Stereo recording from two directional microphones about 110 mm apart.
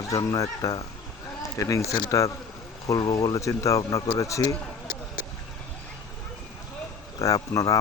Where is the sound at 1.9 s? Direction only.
40° left (ahead or behind).